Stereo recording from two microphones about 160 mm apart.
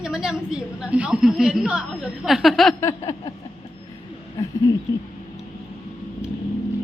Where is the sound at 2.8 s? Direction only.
20° left (ahead or behind).